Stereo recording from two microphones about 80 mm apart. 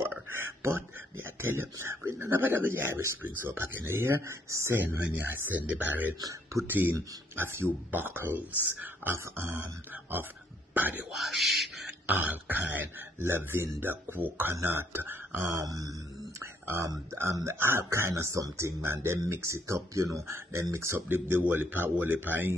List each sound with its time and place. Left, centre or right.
0.0 s speech: right
4.7 s speech: right
10.7 s speech: right
11.1 s speech: centre
12.1 s speech: right
15.6 s a sound: right
16.3 s a sound: right
17.1 s speech: right